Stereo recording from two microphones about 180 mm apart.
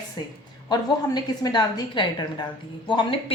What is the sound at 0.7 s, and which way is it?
A woman's voice, 25° left (ahead or behind).